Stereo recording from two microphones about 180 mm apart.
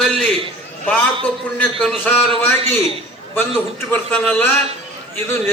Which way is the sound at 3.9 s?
10° left (ahead or behind).